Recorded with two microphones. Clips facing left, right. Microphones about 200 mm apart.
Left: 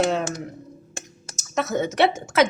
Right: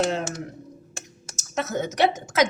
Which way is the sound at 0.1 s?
65° left (ahead or behind).